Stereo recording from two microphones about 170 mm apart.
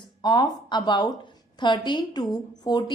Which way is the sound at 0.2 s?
25° left (ahead or behind).